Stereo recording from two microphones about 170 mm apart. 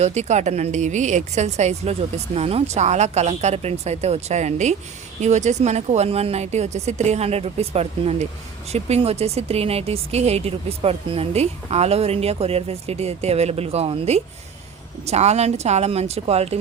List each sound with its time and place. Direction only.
0.0 s speech: 40° right (ahead or behind)